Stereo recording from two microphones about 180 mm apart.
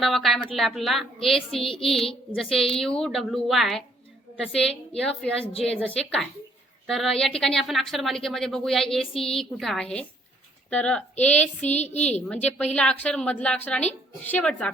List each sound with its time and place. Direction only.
0.0 s a woman's voice: centre (ahead or behind)
11.6 s a woman's voice: 40° left (ahead or behind)
12.3 s a woman's voice: 10° left (ahead or behind)